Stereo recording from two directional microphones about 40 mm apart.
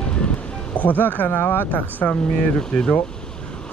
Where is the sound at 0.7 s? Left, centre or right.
Left.